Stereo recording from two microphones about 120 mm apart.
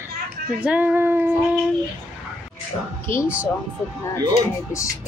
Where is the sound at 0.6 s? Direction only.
10° right (ahead or behind).